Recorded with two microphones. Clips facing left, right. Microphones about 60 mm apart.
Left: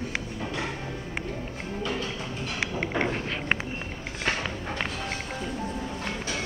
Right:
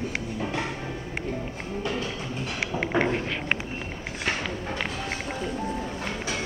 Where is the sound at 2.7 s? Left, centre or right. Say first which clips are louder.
Right 5 dB; centre.